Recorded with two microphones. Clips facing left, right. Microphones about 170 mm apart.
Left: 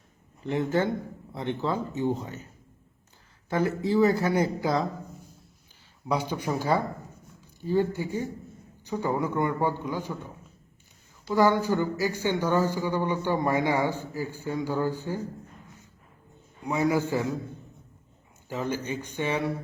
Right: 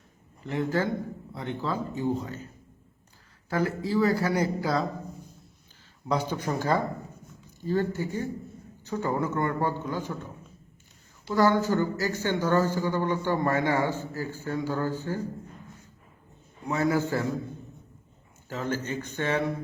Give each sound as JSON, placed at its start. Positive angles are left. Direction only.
{"t": 0.4, "sound": "speech", "side_deg": 25}
{"t": 3.5, "sound": "speech", "side_deg": 25}
{"t": 6.1, "sound": "speech", "side_deg": 10}
{"t": 11.3, "sound": "speech", "side_deg": 15}
{"t": 16.6, "sound": "speech", "side_deg": 15}
{"t": 18.4, "sound": "speech", "side_deg": 15}